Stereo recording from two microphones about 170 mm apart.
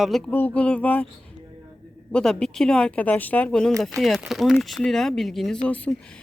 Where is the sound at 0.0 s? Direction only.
Centre (ahead or behind).